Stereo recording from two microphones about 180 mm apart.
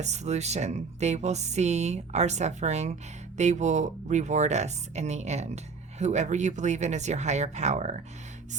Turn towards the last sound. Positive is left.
turn(degrees=-40)  # may be behind; listen again after turning